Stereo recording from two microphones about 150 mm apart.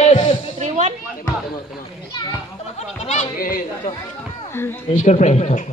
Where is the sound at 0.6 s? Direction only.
50° right (ahead or behind).